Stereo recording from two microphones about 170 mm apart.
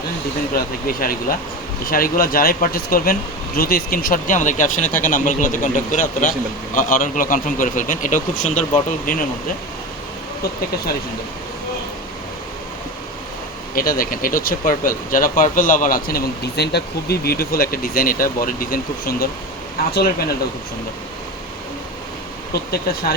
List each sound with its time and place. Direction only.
0.5 s speech: 60° left (ahead or behind)
13.7 s speech: 55° left (ahead or behind)
22.5 s speech: 65° left (ahead or behind)